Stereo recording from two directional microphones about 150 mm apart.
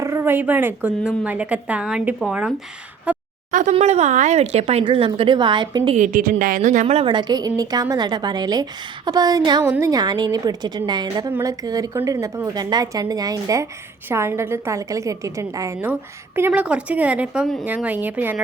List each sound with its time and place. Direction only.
0.0 s a woman's voice: 20° right (ahead or behind)
3.1 s a sound: 10° right (ahead or behind)
3.5 s speech: 50° right (ahead or behind); by 6.0 s 35° right (ahead or behind)
6.0 s a woman's voice: 60° right (ahead or behind); by 11.3 s 30° right (ahead or behind)
11.3 s a woman's voice: 15° right (ahead or behind)
17.7 s a woman's voice: 10° right (ahead or behind)